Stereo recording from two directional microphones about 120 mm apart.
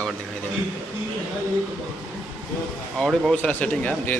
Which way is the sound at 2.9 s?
Centre (ahead or behind).